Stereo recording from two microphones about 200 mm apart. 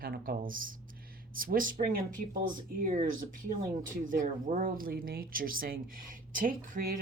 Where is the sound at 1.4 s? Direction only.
45° right (ahead or behind).